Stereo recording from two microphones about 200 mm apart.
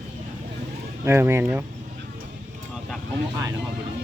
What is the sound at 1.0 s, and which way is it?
Speech, 10° right (ahead or behind).